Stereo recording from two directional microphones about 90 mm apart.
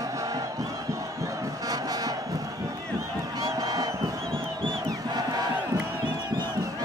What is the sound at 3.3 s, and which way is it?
Crowd, 40° right (ahead or behind).